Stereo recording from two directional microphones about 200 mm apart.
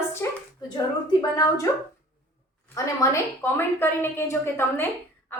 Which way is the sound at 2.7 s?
15° left (ahead or behind).